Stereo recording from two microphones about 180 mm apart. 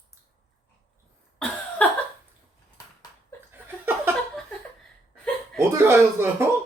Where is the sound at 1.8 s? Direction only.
10° left (ahead or behind).